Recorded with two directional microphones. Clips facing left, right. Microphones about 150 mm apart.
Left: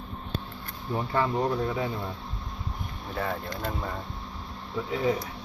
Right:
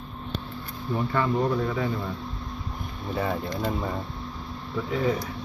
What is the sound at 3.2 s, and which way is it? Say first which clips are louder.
Speech: right 4 dB; 5° right (ahead or behind).